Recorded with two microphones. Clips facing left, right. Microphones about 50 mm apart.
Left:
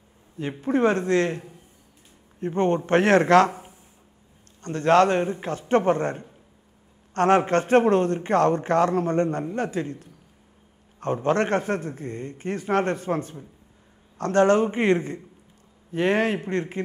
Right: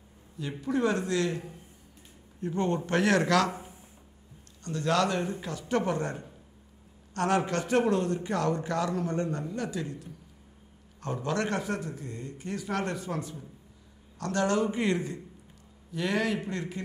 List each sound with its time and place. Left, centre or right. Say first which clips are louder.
0.4 s a man's voice: left 6 dB; left
4.6 s a man's voice: left 9 dB; left